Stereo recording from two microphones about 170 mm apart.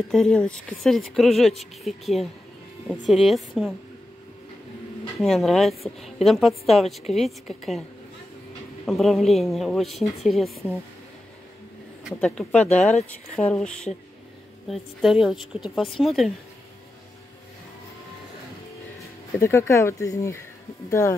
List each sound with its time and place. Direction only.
0.1 s a woman's voice: 5° left (ahead or behind)
5.2 s a woman's voice: centre (ahead or behind)
8.8 s a woman's voice: centre (ahead or behind)
12.0 s a sound: centre (ahead or behind)
12.3 s a woman's voice: 10° left (ahead or behind)
19.4 s speech: 15° left (ahead or behind)